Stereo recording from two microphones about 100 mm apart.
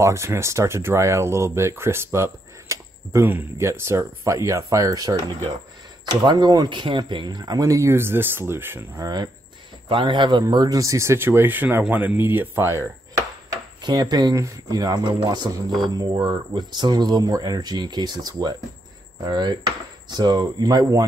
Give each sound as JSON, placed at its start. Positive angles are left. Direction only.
{"t": 0.0, "sound": "speech", "side_deg": -30}
{"t": 9.0, "sound": "speech", "side_deg": -45}
{"t": 10.4, "sound": "speech", "side_deg": -40}
{"t": 13.7, "sound": "speech", "side_deg": -45}